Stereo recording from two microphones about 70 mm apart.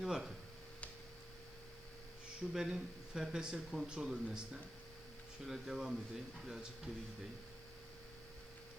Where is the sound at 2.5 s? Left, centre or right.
Centre.